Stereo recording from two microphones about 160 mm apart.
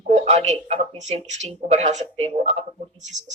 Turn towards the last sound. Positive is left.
turn(degrees=-45)  # may be behind; listen again after turning